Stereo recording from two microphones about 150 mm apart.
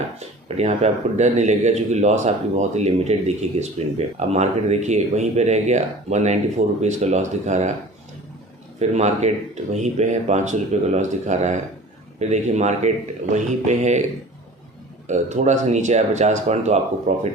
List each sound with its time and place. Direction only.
0.2 s speech: 45° right (ahead or behind)
8.8 s speech: 50° right (ahead or behind)
15.0 s speech: 50° right (ahead or behind)